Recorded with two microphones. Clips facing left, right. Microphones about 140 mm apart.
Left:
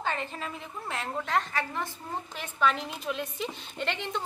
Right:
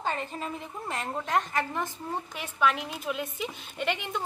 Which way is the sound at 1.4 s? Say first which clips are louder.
Right 2 dB; 20° right (ahead or behind).